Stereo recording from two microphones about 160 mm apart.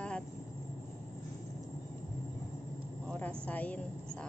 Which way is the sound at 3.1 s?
5° left (ahead or behind).